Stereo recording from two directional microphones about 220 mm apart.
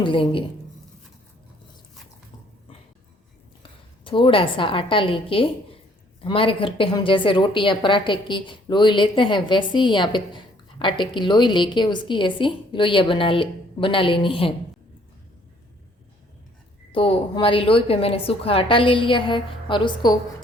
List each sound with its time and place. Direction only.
0.0 s a woman's voice: 25° left (ahead or behind)
3.6 s a woman's voice: 25° left (ahead or behind)
16.9 s a woman's voice: 25° left (ahead or behind)